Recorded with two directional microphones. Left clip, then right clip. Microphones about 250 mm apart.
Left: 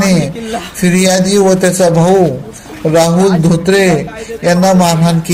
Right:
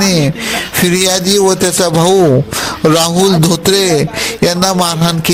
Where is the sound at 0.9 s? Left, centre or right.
Right.